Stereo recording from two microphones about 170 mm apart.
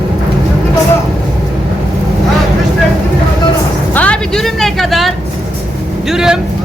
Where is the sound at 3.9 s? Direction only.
5° left (ahead or behind).